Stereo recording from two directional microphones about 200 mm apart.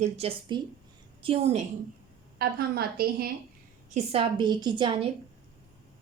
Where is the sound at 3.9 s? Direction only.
30° right (ahead or behind).